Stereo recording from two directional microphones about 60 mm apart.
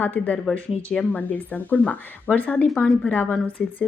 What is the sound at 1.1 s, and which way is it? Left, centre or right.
Speech, left.